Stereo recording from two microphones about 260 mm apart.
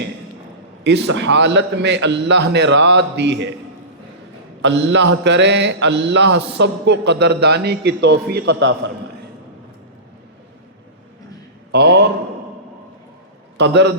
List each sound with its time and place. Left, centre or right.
0.9 s a man's voice: right
4.6 s a man's voice: right
11.7 s a man's voice: right
13.6 s a man's voice: right